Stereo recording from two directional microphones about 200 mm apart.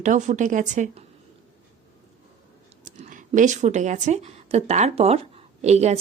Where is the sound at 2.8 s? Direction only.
40° right (ahead or behind).